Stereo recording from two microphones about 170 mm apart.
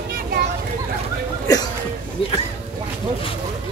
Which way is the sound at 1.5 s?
20° left (ahead or behind).